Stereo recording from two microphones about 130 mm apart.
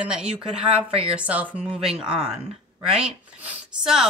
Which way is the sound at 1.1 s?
10° right (ahead or behind).